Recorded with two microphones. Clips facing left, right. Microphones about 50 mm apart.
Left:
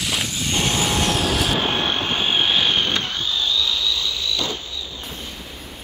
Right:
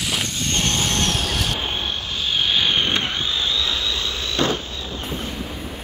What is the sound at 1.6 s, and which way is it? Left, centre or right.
Vehicle, left.